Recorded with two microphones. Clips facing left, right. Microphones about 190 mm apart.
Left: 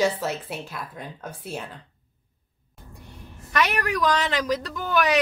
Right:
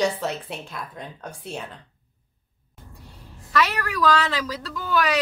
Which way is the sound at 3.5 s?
15° left (ahead or behind).